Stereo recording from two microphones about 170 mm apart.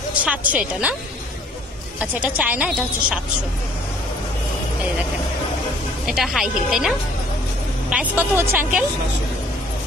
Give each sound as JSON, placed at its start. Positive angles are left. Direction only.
{"t": 0.1, "sound": "a woman's voice", "side_deg": -10}
{"t": 2.0, "sound": "a woman's voice", "side_deg": -10}
{"t": 6.0, "sound": "a woman's voice", "side_deg": -5}